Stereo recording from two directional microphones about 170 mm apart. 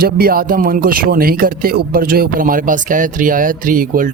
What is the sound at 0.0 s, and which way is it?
Speech, 60° right (ahead or behind).